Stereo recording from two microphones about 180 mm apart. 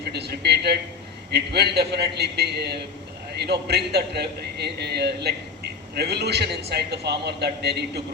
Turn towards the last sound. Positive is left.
turn(degrees=-65)  # may be behind; listen again after turning